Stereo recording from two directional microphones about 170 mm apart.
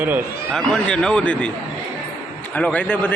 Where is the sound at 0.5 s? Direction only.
5° left (ahead or behind).